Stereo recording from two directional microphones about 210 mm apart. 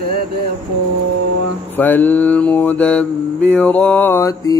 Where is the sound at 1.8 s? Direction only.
10° left (ahead or behind).